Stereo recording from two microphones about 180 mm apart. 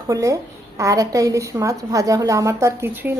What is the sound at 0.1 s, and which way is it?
A woman's voice, 20° right (ahead or behind).